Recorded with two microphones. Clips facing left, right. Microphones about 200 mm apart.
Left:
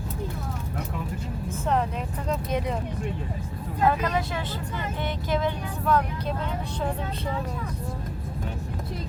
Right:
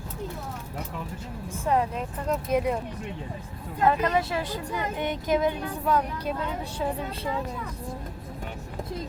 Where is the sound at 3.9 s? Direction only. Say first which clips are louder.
Right 2 dB; 5° right (ahead or behind).